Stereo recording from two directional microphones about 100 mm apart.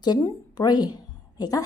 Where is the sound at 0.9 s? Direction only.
40° left (ahead or behind).